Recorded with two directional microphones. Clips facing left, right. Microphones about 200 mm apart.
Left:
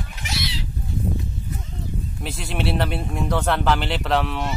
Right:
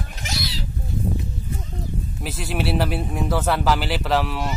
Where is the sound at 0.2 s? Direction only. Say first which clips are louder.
Even; 40° right (ahead or behind).